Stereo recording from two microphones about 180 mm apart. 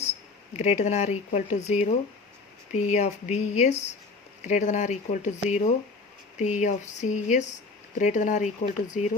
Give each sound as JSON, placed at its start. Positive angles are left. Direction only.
{"t": 0.5, "sound": "speech", "side_deg": 40}